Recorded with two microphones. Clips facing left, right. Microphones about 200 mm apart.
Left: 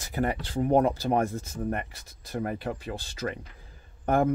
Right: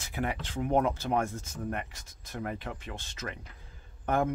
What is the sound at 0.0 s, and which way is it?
Speech, 40° left (ahead or behind).